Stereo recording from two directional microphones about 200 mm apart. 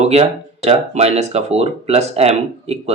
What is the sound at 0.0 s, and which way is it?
Speech, 30° right (ahead or behind).